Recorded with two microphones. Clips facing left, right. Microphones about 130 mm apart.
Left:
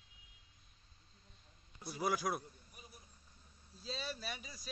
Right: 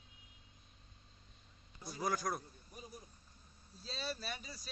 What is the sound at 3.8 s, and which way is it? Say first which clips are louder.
Speech: right 1 dB; 10° left (ahead or behind).